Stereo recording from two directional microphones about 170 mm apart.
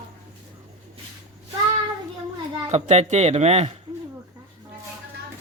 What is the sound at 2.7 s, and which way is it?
Speech, 40° right (ahead or behind).